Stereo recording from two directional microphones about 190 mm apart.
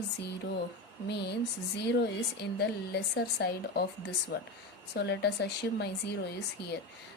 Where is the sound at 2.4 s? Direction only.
60° left (ahead or behind).